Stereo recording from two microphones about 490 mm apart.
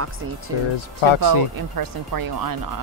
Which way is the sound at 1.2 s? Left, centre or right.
Right.